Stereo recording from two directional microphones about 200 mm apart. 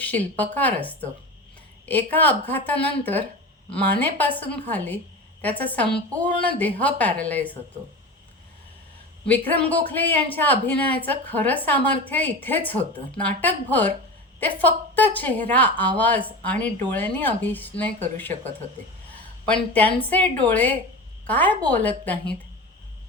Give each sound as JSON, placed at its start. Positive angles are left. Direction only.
{"t": 0.0, "sound": "a woman's voice", "side_deg": 10}
{"t": 9.2, "sound": "a woman's voice", "side_deg": 5}